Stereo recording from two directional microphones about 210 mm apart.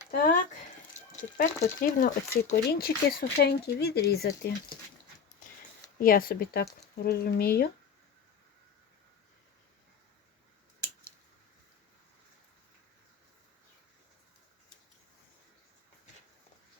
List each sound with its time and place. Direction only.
0.2 s a sound: 40° left (ahead or behind)
1.1 s speech: 40° left (ahead or behind)
6.0 s speech: 45° left (ahead or behind)